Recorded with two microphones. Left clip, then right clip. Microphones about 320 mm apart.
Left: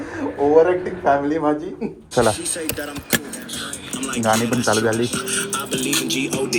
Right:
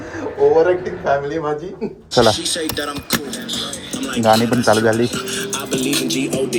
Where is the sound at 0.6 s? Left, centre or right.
Centre.